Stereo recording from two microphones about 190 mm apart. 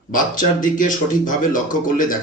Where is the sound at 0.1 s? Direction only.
45° left (ahead or behind).